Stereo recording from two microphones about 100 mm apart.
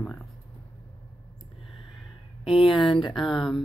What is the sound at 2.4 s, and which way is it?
Speech, 55° left (ahead or behind).